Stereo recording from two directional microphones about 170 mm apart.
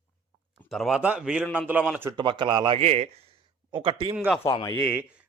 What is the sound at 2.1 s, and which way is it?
Speech, 25° right (ahead or behind).